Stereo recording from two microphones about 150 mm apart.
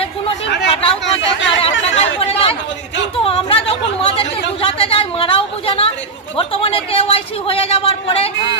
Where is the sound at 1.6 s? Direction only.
40° left (ahead or behind).